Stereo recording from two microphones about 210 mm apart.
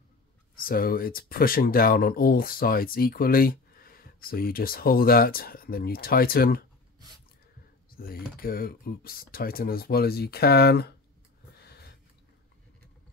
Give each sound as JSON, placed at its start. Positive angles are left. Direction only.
{"t": 0.6, "sound": "speech", "side_deg": 45}
{"t": 7.9, "sound": "speech", "side_deg": 45}